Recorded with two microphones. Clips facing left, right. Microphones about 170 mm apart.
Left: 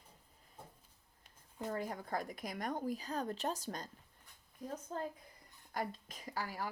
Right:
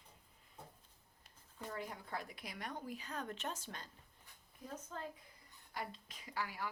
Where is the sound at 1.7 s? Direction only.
45° left (ahead or behind).